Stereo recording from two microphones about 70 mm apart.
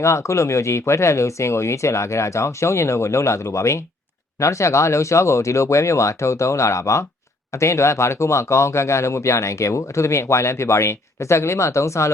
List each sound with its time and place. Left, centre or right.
0.0 s speech: left